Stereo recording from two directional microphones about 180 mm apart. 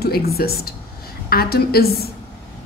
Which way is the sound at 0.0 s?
60° left (ahead or behind).